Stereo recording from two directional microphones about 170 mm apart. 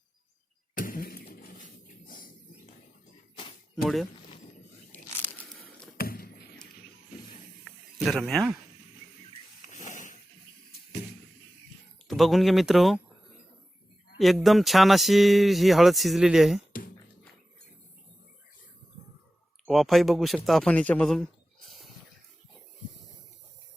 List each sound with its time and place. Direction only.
0.8 s cough: 55° left (ahead or behind)
6.0 s a sound: 65° left (ahead or behind)
7.6 s snake: centre (ahead or behind)
9.6 s a sound: 45° left (ahead or behind)
12.0 s speech: centre (ahead or behind)
14.4 s speech: centre (ahead or behind)
19.6 s a man's voice: centre (ahead or behind)